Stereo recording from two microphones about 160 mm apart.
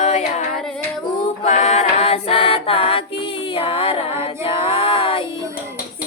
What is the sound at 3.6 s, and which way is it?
Female singing, 35° left (ahead or behind).